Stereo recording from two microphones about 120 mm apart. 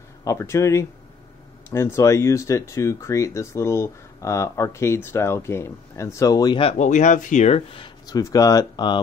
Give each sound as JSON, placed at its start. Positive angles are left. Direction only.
{"t": 0.2, "sound": "speech", "side_deg": 25}
{"t": 6.8, "sound": "speech", "side_deg": 90}
{"t": 8.1, "sound": "speech", "side_deg": 30}